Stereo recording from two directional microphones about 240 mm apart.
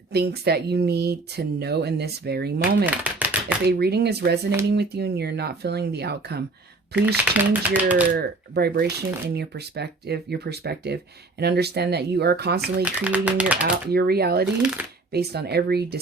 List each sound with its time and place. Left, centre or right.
0.1 s speech: right
2.8 s speech: centre
3.7 s speech: right
7.3 s speech: centre
8.1 s speech: right
12.8 s speech: centre
13.9 s speech: right